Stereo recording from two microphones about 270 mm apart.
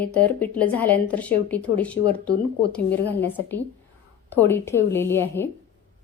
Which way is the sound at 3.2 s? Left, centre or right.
Centre.